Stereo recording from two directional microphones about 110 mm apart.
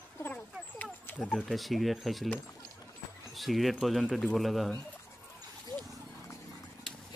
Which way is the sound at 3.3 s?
Centre (ahead or behind).